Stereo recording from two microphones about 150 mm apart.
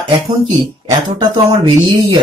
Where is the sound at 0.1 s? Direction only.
30° right (ahead or behind).